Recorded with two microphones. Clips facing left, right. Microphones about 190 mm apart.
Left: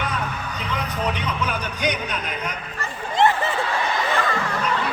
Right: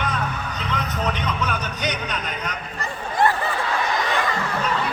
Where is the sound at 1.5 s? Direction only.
10° left (ahead or behind).